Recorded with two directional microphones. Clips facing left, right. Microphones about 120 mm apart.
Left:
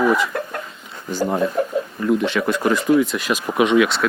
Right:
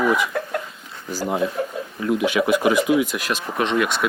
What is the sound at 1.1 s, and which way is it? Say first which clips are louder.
Speech: left 3 dB; 5° right (ahead or behind).